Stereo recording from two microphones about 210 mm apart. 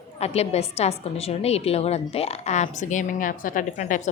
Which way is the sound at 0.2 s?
30° left (ahead or behind).